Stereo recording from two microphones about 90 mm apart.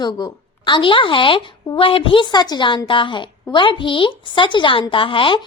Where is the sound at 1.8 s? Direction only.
90° left.